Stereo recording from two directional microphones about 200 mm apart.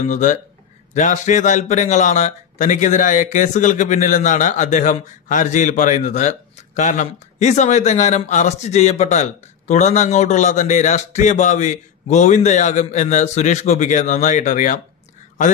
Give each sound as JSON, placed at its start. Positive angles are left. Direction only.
{"t": 0.0, "sound": "a man's voice", "side_deg": 40}